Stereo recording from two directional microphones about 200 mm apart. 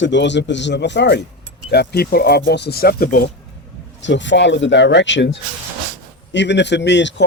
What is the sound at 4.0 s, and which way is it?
Speech, 65° left (ahead or behind).